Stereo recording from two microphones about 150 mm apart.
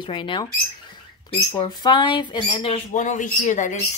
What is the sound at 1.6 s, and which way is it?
Speech, 30° left (ahead or behind).